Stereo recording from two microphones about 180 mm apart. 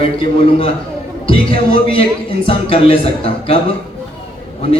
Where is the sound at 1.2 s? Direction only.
30° left (ahead or behind).